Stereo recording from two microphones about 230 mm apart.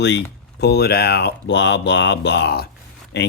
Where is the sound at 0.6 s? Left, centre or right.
Left.